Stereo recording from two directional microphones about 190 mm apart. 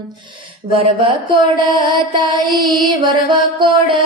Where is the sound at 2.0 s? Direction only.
25° right (ahead or behind).